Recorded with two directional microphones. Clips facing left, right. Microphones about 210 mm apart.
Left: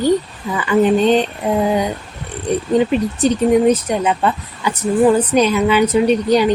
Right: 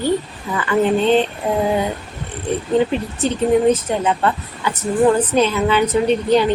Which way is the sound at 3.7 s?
15° left (ahead or behind).